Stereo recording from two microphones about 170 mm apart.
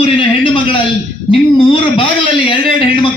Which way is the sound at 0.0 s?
30° left (ahead or behind).